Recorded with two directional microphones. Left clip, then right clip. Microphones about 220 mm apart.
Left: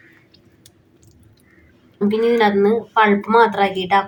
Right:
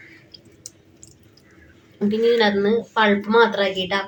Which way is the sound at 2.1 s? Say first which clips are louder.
Left 2 dB; 35° left (ahead or behind).